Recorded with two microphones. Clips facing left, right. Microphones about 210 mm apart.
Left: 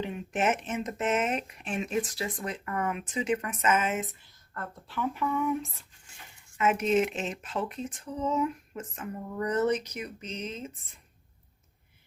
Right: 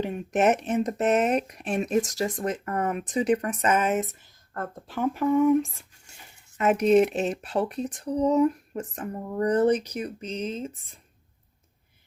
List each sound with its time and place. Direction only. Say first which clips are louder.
0.0 s speech: right 6 dB; 45° right (ahead or behind)
6.6 s speech: right 6 dB; 40° right (ahead or behind)